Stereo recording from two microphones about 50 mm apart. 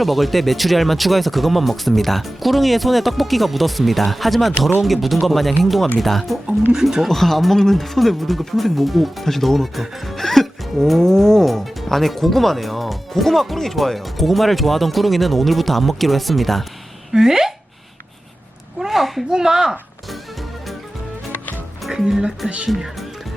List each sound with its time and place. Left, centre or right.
0.0 s music: centre
17.1 s speech: centre
18.8 s a sound: centre
19.3 s speech: centre
21.8 s speech: centre
22.4 s speech: right